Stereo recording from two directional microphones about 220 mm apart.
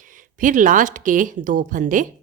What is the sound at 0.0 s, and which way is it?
Speech, 35° right (ahead or behind).